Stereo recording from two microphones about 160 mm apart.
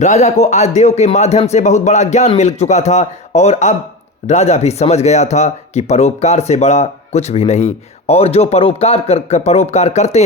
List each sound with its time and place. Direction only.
0.0 s speech: 45° left (ahead or behind)